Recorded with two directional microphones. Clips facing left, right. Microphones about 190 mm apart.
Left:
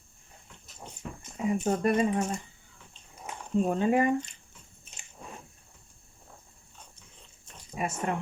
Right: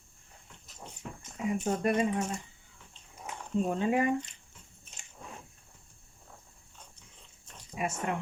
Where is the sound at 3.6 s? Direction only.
45° left (ahead or behind).